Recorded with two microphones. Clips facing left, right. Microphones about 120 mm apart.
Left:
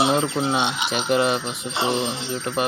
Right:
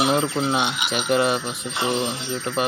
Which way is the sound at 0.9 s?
Centre (ahead or behind).